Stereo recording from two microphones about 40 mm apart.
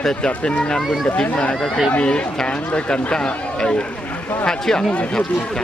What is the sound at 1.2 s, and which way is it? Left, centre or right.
Speech, left.